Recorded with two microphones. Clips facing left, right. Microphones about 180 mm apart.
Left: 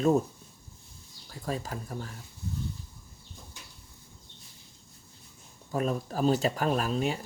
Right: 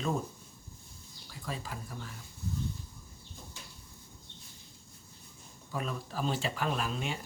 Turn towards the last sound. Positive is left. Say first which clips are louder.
# left 6 dB
turn(degrees=40)  # may be behind; listen again after turning